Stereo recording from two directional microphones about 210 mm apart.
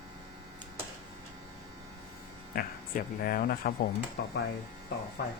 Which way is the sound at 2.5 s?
45° left (ahead or behind).